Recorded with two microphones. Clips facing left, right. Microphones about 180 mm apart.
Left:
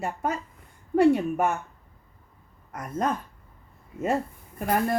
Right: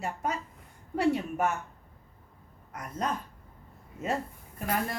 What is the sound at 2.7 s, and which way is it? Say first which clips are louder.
Speech: left 5 dB; 50° left (ahead or behind).